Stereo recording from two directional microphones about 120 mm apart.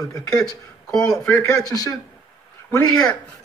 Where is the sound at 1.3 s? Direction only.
25° left (ahead or behind).